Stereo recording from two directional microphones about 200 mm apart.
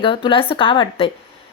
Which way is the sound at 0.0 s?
25° left (ahead or behind).